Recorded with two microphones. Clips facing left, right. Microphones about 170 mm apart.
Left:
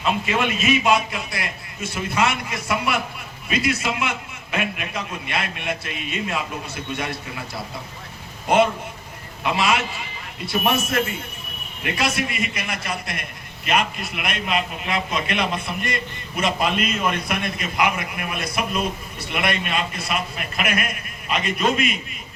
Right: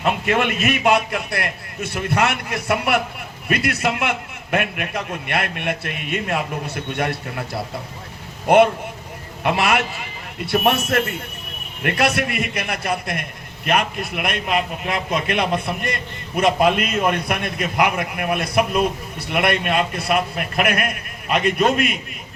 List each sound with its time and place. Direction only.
0.0 s a man's voice: 60° right (ahead or behind)
8.4 s a man's voice: 60° right (ahead or behind)